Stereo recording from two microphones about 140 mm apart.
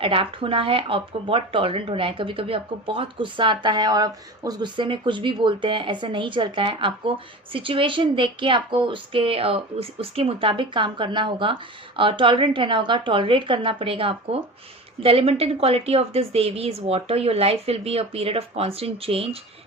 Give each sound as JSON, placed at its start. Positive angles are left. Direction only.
{"t": 0.0, "sound": "a woman's voice", "side_deg": -40}